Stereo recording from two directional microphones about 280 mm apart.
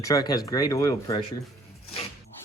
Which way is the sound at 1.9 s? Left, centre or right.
Left.